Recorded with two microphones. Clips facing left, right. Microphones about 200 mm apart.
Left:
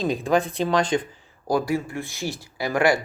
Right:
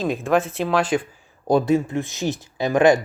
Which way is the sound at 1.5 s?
25° right (ahead or behind).